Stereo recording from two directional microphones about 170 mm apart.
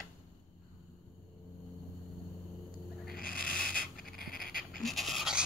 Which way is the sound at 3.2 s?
55° left (ahead or behind).